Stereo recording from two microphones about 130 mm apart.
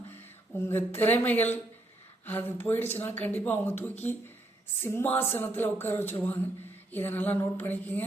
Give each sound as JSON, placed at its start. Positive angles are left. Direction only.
{"t": 0.7, "sound": "speech", "side_deg": 15}